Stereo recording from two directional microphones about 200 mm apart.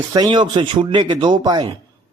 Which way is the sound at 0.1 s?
20° right (ahead or behind).